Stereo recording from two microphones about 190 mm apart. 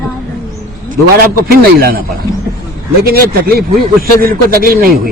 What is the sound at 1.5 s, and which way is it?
Speech, 50° right (ahead or behind).